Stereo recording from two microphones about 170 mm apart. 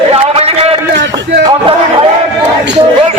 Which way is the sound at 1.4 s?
30° right (ahead or behind).